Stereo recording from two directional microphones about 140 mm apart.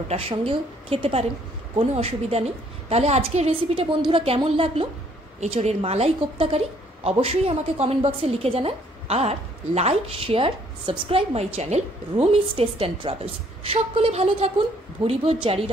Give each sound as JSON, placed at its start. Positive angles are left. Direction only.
{"t": 0.1, "sound": "a woman's voice", "side_deg": -45}